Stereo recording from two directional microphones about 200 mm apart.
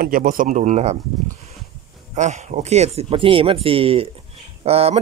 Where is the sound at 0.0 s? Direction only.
45° right (ahead or behind).